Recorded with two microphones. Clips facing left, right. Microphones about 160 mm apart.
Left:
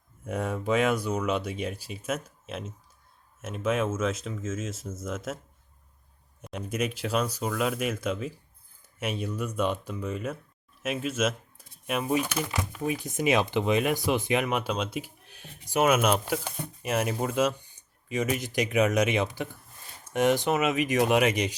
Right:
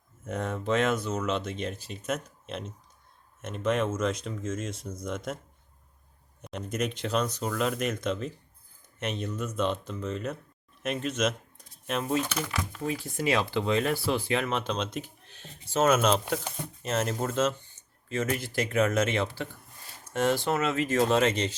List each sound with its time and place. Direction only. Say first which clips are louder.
0.3 s speech: left 1 dB; 10° left (ahead or behind)
6.4 s speech: left 1 dB; 5° left (ahead or behind)